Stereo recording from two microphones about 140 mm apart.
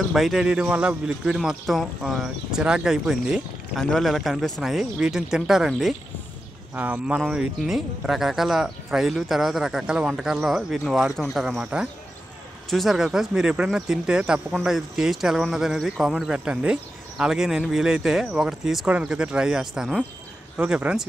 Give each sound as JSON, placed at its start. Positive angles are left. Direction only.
{"t": 0.1, "sound": "speech", "side_deg": 0}